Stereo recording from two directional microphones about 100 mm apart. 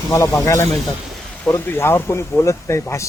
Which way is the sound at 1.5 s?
25° left (ahead or behind).